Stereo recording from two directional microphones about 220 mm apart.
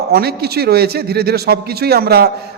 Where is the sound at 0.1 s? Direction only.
45° right (ahead or behind).